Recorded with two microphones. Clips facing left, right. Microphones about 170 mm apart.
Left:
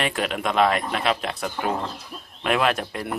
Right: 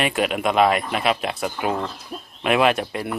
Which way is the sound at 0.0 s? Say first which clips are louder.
Right 4 dB; 10° right (ahead or behind).